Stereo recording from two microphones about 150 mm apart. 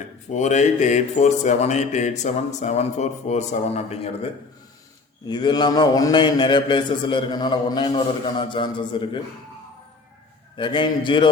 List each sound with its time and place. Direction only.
0.3 s speech: 50° left (ahead or behind)
5.2 s a man's voice: 30° left (ahead or behind)
10.6 s a man's voice: 35° left (ahead or behind)